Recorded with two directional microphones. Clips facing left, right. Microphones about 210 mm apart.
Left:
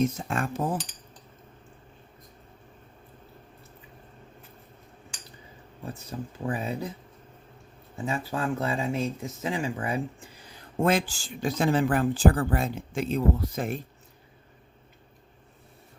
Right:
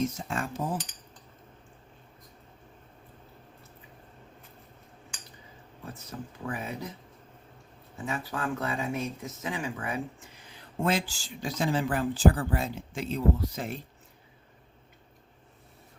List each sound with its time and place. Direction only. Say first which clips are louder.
0.0 s cutlery: left 4 dB; 60° left (ahead or behind)
6.1 s speech: left 5 dB; 30° left (ahead or behind)
8.0 s speech: left 3 dB; 25° left (ahead or behind)
10.8 s speech: left 4 dB; 50° left (ahead or behind)